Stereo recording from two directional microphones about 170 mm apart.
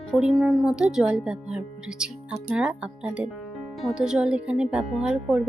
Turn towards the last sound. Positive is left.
turn(degrees=-5)  # may be behind; listen again after turning